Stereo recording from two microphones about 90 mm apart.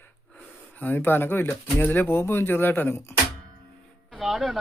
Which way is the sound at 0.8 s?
25° left (ahead or behind).